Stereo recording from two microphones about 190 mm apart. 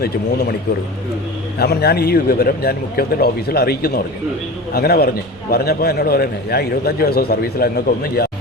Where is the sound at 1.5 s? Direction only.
55° left (ahead or behind).